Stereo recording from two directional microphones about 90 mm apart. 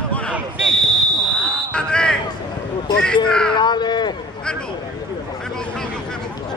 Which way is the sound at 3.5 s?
55° left (ahead or behind).